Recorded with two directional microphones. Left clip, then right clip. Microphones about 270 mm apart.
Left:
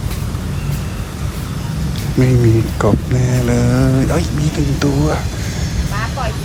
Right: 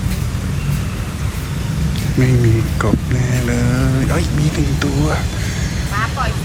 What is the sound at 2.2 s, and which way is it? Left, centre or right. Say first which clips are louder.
Speech: left 3 dB; centre.